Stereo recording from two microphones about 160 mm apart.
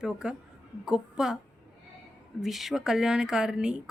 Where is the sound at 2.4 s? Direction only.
Centre (ahead or behind).